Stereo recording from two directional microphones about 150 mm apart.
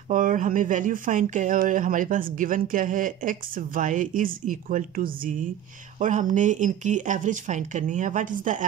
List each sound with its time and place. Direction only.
0.1 s speech: 60° right (ahead or behind)
5.9 s speech: 55° right (ahead or behind)